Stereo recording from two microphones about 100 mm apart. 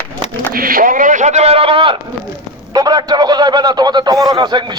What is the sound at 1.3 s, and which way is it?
Speech, 85° right.